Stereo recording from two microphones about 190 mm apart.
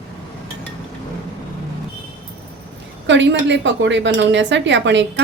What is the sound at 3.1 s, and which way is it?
Speech, 70° right (ahead or behind).